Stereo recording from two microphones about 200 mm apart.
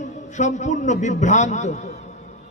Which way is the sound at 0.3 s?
35° left (ahead or behind).